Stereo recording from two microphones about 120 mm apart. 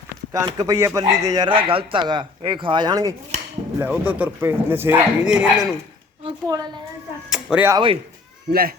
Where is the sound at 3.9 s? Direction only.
15° right (ahead or behind).